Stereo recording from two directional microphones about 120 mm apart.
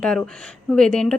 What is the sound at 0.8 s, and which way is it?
Speech, 5° left (ahead or behind).